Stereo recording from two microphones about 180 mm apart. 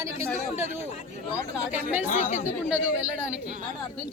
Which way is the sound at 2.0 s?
40° left (ahead or behind).